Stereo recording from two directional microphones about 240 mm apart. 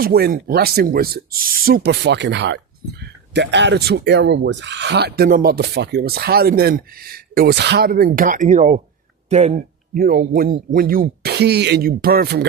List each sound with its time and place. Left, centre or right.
0.0 s speech: right